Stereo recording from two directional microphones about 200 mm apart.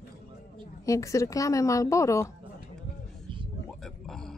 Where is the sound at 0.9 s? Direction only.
15° left (ahead or behind).